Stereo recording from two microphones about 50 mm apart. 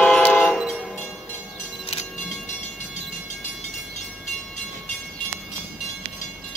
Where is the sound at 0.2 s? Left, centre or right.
Left.